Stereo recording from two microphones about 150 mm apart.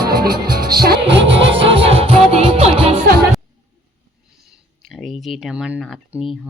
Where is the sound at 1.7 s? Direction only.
40° right (ahead or behind).